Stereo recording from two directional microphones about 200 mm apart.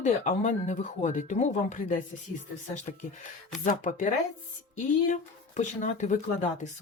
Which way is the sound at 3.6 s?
40° left (ahead or behind).